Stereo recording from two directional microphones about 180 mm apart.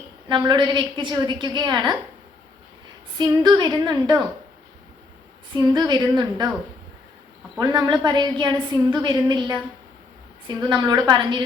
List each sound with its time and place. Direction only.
0.3 s a woman's voice: 25° right (ahead or behind)
3.2 s a woman's voice: 25° right (ahead or behind)
5.5 s a woman's voice: 25° right (ahead or behind)
7.6 s a woman's voice: 20° right (ahead or behind)